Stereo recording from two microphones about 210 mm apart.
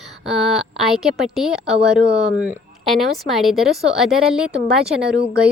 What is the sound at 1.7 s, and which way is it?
Speech, 30° right (ahead or behind).